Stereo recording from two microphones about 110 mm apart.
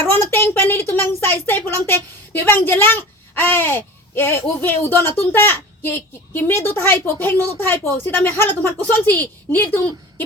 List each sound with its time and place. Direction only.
0.0 s a woman's voice: 20° left (ahead or behind)